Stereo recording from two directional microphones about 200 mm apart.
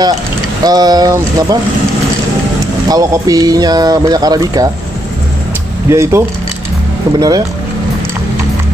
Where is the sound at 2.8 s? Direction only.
20° right (ahead or behind).